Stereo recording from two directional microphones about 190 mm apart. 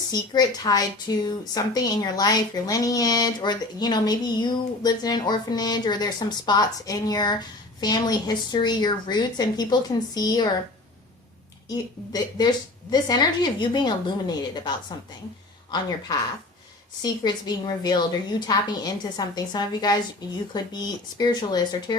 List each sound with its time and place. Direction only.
0.1 s a woman's voice: 20° left (ahead or behind)
11.7 s a woman's voice: 20° left (ahead or behind)
15.7 s a woman's voice: 20° left (ahead or behind)